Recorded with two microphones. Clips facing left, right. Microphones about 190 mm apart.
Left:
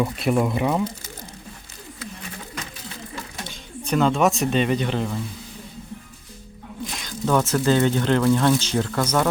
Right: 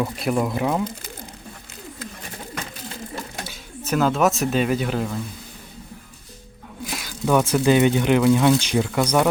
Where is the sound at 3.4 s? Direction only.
5° right (ahead or behind).